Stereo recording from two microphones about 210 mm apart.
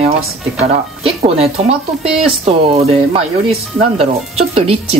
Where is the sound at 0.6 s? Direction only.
30° right (ahead or behind).